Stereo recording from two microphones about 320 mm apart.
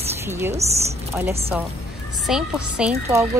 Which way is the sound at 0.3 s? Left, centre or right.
Centre.